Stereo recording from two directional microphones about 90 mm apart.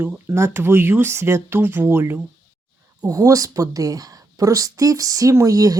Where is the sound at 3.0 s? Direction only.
40° right (ahead or behind).